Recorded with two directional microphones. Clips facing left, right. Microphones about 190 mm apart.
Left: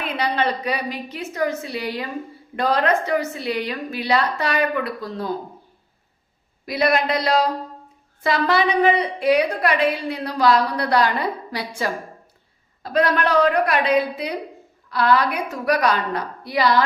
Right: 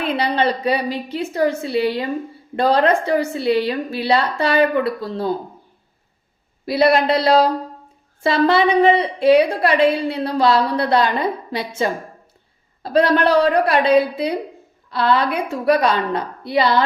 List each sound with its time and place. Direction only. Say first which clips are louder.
0.0 s a woman's voice: right 4 dB; 30° right (ahead or behind)
6.7 s a woman's voice: right 5 dB; 30° right (ahead or behind)